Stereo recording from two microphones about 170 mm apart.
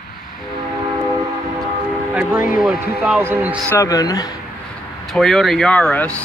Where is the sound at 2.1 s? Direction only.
10° right (ahead or behind).